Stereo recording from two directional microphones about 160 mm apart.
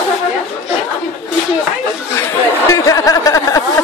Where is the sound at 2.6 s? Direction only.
20° left (ahead or behind).